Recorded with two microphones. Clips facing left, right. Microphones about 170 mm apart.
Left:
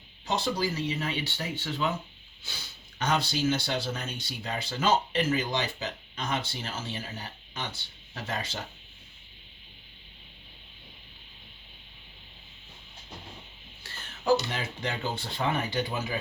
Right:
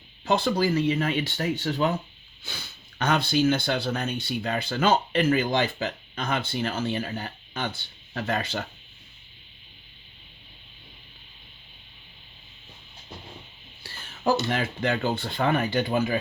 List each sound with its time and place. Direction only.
0.3 s speech: 60° right (ahead or behind)
14.5 s speech: 60° right (ahead or behind)